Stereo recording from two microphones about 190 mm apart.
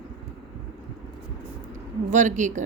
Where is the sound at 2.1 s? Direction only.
40° right (ahead or behind).